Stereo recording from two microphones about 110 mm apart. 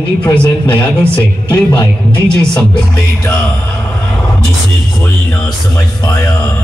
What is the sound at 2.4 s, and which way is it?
Music, 10° left (ahead or behind).